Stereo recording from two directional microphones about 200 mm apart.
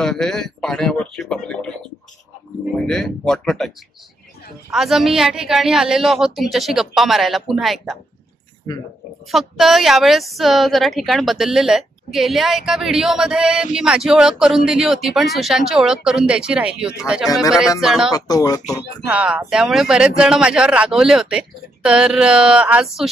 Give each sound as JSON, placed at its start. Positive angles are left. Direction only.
{"t": 0.0, "sound": "a woman's voice", "side_deg": 0}
{"t": 2.9, "sound": "a woman's voice", "side_deg": 0}
{"t": 4.7, "sound": "a woman's voice", "side_deg": 0}
{"t": 9.3, "sound": "a woman's voice", "side_deg": 0}
{"t": 18.1, "sound": "speech", "side_deg": 20}
{"t": 19.0, "sound": "a woman's voice", "side_deg": -5}